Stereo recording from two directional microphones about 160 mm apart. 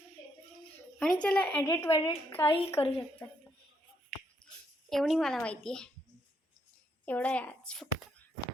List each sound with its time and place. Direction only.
0.9 s a child's voice: 5° left (ahead or behind)
4.9 s speech: centre (ahead or behind)
7.0 s a child's voice: 10° left (ahead or behind)